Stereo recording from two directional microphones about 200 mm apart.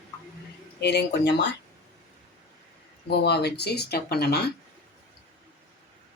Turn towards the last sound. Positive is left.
turn(degrees=50)  # may be behind; listen again after turning